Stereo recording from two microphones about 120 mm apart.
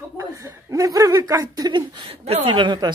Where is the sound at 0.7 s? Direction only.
30° right (ahead or behind).